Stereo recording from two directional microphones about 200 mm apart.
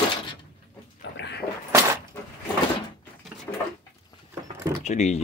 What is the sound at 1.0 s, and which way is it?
Dog, 60° left (ahead or behind).